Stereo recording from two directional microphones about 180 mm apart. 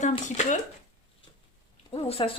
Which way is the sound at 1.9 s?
30° left (ahead or behind).